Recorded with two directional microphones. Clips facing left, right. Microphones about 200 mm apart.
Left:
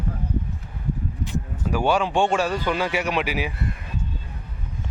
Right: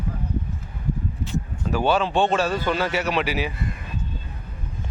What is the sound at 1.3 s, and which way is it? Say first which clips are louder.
Speech: even; 10° left (ahead or behind).